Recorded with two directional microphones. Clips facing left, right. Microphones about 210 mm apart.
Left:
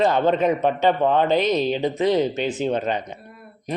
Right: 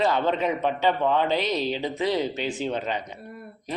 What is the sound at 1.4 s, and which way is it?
Speech, 20° left (ahead or behind).